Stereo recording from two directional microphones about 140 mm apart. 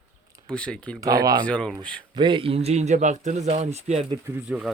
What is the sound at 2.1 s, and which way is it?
A man's voice, 35° right (ahead or behind).